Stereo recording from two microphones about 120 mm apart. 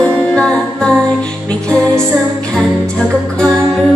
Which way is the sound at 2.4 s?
5° left (ahead or behind).